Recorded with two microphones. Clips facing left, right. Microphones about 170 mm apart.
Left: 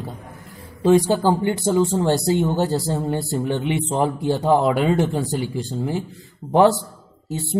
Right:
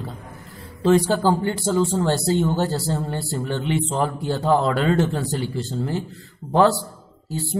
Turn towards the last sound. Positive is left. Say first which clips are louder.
# left 1 dB
turn(degrees=20)  # may be behind; listen again after turning